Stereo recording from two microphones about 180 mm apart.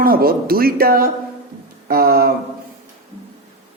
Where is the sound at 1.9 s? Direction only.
60° right (ahead or behind).